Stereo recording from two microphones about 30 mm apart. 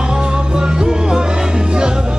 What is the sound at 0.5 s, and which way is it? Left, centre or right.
Music, right.